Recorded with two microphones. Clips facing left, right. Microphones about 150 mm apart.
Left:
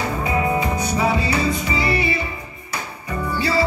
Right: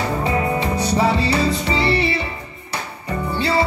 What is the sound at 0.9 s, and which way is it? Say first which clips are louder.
Music: right 3 dB; 30° right (ahead or behind).